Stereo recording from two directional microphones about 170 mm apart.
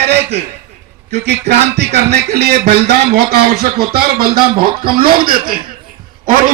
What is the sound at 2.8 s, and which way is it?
Speech, 40° right (ahead or behind).